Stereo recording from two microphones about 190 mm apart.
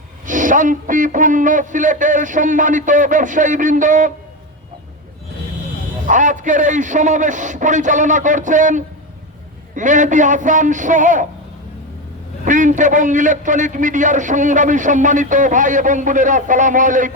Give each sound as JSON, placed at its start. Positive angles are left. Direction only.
{"t": 0.3, "sound": "a man's voice", "side_deg": -45}
{"t": 6.1, "sound": "a man's voice", "side_deg": -40}
{"t": 12.5, "sound": "a man's voice", "side_deg": -40}